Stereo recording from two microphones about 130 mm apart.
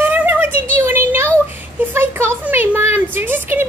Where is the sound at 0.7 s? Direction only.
15° right (ahead or behind).